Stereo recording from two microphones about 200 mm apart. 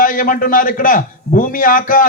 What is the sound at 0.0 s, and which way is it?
A man's voice, 40° left (ahead or behind).